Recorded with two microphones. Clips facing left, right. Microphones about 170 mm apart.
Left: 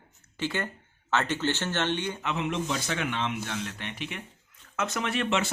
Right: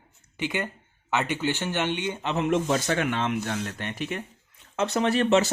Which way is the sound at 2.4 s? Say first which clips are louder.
Right 9 dB; 45° right (ahead or behind).